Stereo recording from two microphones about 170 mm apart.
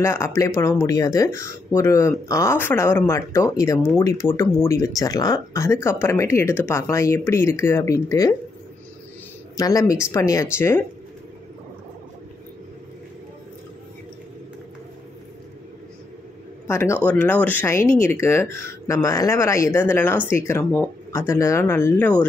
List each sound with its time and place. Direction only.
0.0 s speech: 15° left (ahead or behind)
9.6 s speech: 20° left (ahead or behind)
16.6 s speech: 15° left (ahead or behind)